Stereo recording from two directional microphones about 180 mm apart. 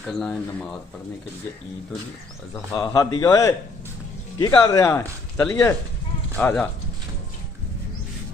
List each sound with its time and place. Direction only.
0.1 s speech: centre (ahead or behind)
2.7 s speech: 20° left (ahead or behind)